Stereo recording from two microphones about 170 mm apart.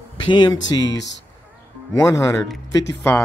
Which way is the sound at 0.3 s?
25° left (ahead or behind).